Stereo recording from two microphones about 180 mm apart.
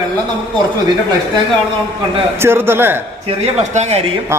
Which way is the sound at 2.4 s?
15° right (ahead or behind).